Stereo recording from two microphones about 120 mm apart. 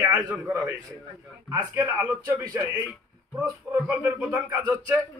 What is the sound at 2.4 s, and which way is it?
Speech, 35° right (ahead or behind).